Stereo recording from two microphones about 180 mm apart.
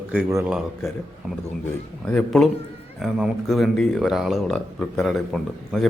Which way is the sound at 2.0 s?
5° left (ahead or behind).